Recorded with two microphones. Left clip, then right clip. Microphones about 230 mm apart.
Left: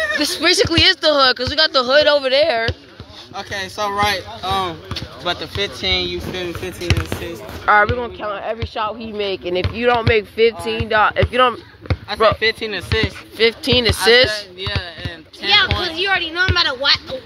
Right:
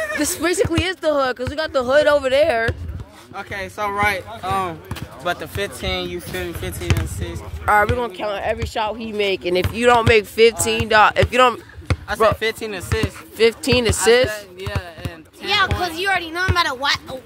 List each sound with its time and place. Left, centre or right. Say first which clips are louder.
0.2 s speech: left 3 dB; right
0.5 s speech: left 8 dB; centre
3.3 s speech: left 3 dB; centre
5.2 s speech: left 2 dB; centre
8.0 s speech: right 1 dB; right
14.3 s music: left 5 dB; centre
15.4 s a sound: left 6 dB; centre
16.0 s speech: left 4 dB; right